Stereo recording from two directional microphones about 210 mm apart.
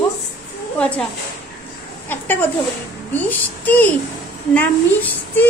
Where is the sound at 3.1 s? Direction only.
10° left (ahead or behind).